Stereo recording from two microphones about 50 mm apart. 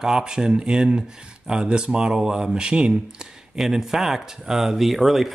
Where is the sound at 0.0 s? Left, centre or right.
Centre.